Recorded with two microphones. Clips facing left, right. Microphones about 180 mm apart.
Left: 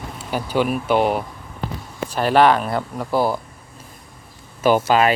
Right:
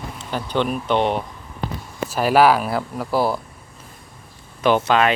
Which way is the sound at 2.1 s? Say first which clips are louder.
Even; 5° right (ahead or behind).